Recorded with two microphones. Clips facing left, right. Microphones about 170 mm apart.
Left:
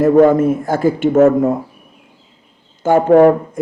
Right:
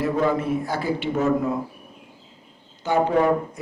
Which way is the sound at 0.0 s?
50° left (ahead or behind).